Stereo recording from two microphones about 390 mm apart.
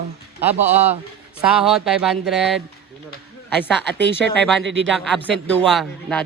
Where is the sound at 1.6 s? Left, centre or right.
Centre.